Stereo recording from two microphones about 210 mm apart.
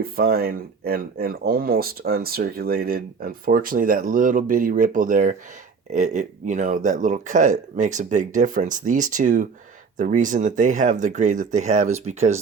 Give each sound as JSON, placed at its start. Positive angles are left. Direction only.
{"t": 0.0, "sound": "speech", "side_deg": -45}